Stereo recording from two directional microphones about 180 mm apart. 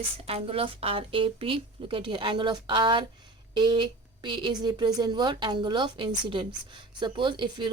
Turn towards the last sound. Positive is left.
turn(degrees=-25)  # may be behind; listen again after turning